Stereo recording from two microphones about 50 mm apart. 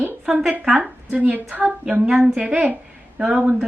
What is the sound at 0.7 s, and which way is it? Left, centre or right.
A woman's voice, right.